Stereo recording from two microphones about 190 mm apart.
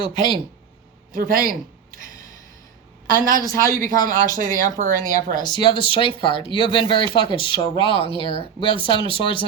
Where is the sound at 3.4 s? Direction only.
20° left (ahead or behind).